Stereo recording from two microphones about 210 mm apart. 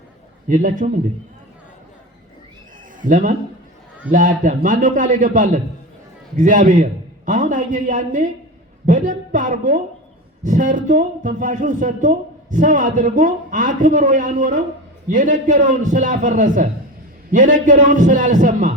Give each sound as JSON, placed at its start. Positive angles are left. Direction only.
{"t": 0.4, "sound": "speech", "side_deg": -40}
{"t": 3.0, "sound": "speech", "side_deg": -40}